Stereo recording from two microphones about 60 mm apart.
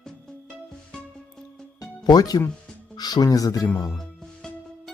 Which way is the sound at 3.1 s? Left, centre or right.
Left.